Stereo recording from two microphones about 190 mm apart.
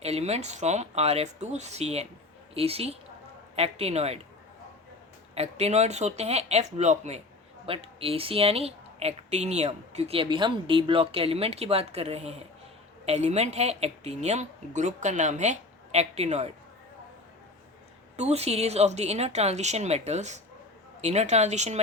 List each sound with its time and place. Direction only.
0.0 s speech: 35° right (ahead or behind)
5.3 s speech: 35° right (ahead or behind)
18.2 s speech: 35° right (ahead or behind)